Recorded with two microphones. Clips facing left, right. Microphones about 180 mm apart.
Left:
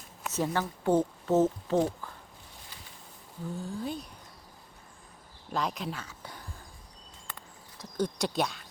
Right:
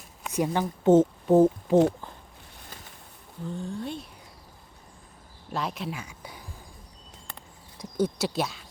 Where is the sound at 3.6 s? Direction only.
Centre (ahead or behind).